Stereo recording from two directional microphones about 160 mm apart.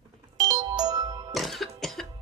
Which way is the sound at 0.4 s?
25° right (ahead or behind).